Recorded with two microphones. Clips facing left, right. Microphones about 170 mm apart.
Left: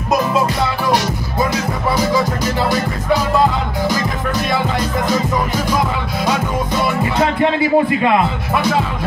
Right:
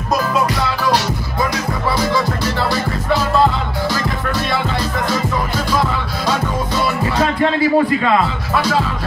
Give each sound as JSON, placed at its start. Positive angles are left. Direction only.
{"t": 5.7, "sound": "music", "side_deg": 15}